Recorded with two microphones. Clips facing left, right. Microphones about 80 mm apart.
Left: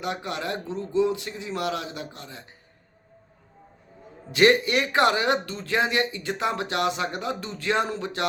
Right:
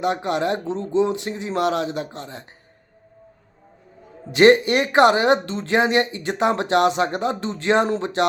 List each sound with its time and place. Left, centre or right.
0.0 s speech: right
4.3 s speech: right